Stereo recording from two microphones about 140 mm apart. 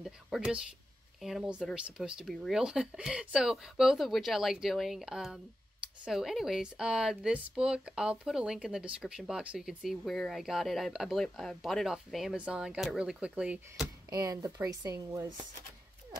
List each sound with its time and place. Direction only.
0.0 s speech: 5° right (ahead or behind)
14.1 s speech: 25° right (ahead or behind)